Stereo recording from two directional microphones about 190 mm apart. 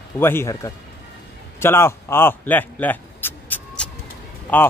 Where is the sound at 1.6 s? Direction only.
15° left (ahead or behind).